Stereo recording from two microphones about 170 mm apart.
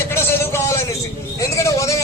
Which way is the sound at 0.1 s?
15° left (ahead or behind).